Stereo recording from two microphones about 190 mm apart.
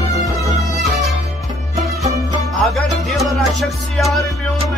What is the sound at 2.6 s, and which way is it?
Music, centre (ahead or behind).